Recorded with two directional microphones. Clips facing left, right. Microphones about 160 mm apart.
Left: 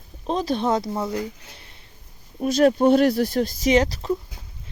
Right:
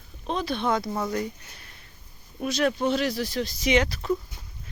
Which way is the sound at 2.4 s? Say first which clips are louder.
Left 8 dB; 40° left (ahead or behind).